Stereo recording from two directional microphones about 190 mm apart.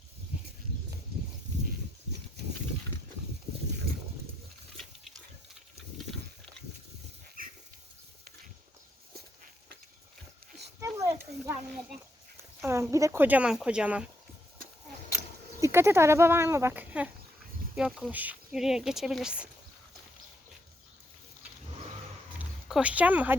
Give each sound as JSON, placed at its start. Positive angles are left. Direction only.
{"t": 0.3, "sound": "a sound", "side_deg": -10}
{"t": 7.4, "sound": "dog", "side_deg": -50}
{"t": 10.8, "sound": "a sound", "side_deg": -15}
{"t": 12.6, "sound": "speech", "side_deg": -15}
{"t": 15.6, "sound": "speech", "side_deg": -15}
{"t": 22.4, "sound": "speech", "side_deg": -5}